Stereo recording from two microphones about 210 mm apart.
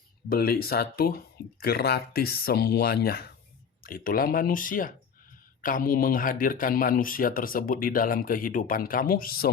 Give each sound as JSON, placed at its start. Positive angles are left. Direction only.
{"t": 0.3, "sound": "speech", "side_deg": 45}